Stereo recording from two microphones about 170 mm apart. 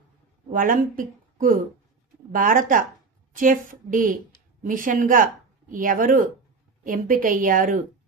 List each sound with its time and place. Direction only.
0.5 s speech: 55° right (ahead or behind)